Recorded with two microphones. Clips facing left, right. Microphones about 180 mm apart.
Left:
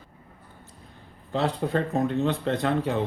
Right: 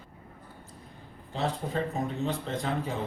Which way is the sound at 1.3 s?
70° left (ahead or behind).